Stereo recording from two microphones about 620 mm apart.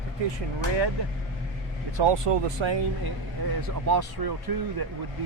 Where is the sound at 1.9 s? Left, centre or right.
Right.